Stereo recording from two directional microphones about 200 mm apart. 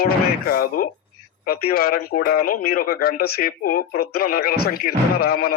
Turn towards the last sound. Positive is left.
turn(degrees=50)  # may be behind; listen again after turning